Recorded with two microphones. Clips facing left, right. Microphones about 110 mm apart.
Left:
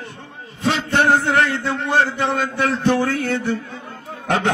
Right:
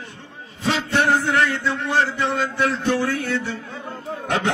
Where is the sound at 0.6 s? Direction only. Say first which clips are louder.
Left 2 dB; 60° left (ahead or behind).